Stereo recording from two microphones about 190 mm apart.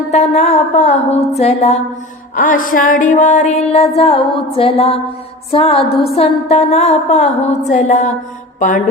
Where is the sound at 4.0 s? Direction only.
30° left (ahead or behind).